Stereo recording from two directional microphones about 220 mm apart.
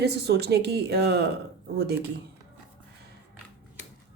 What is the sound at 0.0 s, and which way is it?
Speech, 50° right (ahead or behind).